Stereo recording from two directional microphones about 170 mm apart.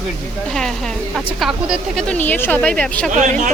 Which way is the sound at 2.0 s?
10° left (ahead or behind).